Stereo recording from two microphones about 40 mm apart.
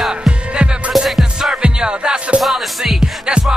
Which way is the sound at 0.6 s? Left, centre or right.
Right.